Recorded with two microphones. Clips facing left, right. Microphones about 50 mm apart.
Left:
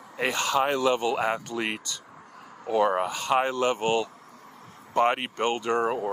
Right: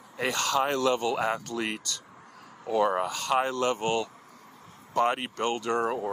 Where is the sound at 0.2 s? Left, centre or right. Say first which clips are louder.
Left 2 dB; left.